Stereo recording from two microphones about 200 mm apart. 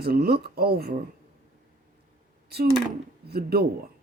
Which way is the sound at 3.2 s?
50° right (ahead or behind).